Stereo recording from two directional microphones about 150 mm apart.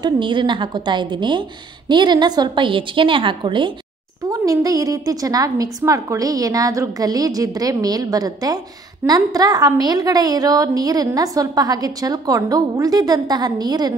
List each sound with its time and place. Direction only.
0.0 s a woman's voice: 30° right (ahead or behind)